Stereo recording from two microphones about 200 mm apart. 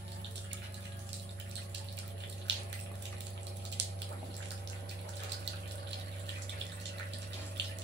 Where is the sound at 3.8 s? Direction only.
60° right (ahead or behind).